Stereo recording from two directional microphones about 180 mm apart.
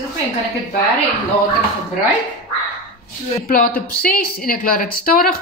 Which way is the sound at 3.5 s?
55° left (ahead or behind).